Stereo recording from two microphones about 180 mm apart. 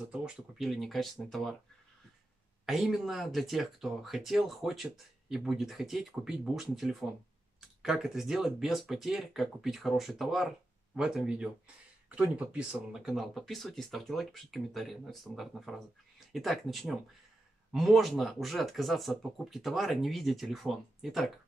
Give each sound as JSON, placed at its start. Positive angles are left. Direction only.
{"t": 0.1, "sound": "speech", "side_deg": -5}
{"t": 2.6, "sound": "speech", "side_deg": 0}